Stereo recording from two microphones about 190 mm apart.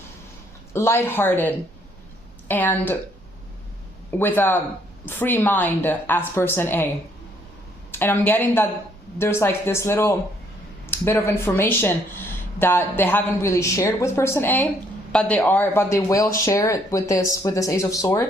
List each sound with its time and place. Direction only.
0.7 s speech: 15° left (ahead or behind)
4.2 s speech: 10° left (ahead or behind)
7.9 s speech: 10° left (ahead or behind)